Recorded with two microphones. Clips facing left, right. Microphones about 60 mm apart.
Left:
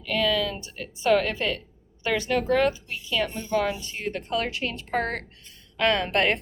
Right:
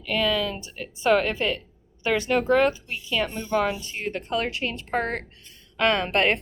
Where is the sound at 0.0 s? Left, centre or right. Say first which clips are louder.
Even; right.